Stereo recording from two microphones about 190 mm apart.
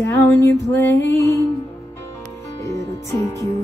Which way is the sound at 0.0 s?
15° left (ahead or behind).